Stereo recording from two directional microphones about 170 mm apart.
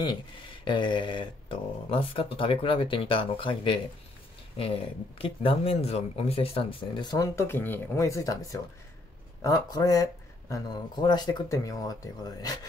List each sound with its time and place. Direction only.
0.7 s speech: 30° left (ahead or behind)
5.2 s speech: 35° left (ahead or behind)